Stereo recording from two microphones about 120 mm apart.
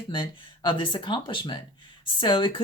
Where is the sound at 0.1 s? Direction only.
45° left (ahead or behind).